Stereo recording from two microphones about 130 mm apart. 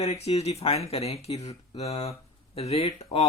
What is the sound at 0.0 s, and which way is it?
Speech, 55° left (ahead or behind).